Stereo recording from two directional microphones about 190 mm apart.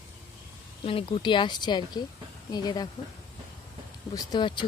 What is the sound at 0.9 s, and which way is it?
Speech, 30° left (ahead or behind).